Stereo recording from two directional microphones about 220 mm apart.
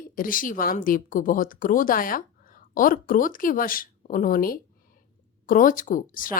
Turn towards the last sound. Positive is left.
turn(degrees=40)  # may be behind; listen again after turning